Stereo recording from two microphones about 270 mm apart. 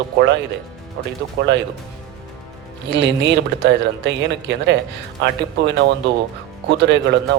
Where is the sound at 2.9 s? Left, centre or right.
Right.